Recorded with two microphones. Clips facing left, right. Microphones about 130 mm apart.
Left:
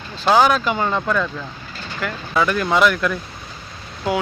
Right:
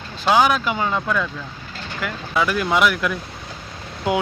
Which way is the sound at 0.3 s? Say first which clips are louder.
Left 2 dB; 10° right (ahead or behind).